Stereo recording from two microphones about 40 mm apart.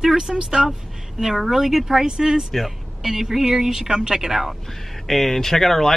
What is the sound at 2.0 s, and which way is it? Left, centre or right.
Speech, centre.